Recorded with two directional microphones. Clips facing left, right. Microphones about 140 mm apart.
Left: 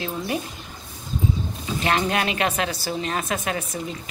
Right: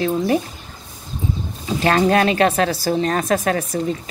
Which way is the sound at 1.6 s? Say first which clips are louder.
Right 7 dB; 35° right (ahead or behind).